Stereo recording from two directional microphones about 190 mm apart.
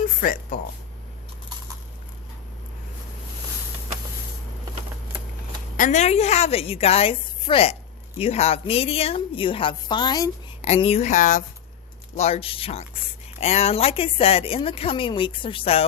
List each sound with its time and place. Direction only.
0.2 s speech: 50° left (ahead or behind)
5.7 s a woman's voice: 40° left (ahead or behind); by 10.3 s 20° left (ahead or behind)
10.6 s a woman's voice: 35° left (ahead or behind)